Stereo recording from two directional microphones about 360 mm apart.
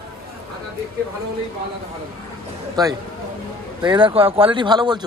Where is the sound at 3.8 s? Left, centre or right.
Centre.